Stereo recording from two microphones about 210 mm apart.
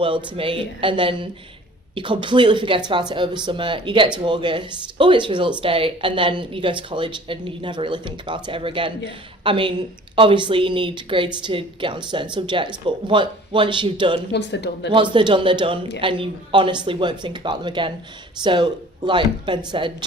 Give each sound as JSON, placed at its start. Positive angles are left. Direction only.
{"t": 0.0, "sound": "speech", "side_deg": -25}
{"t": 14.3, "sound": "a man's voice", "side_deg": 55}
{"t": 14.8, "sound": "speech", "side_deg": -25}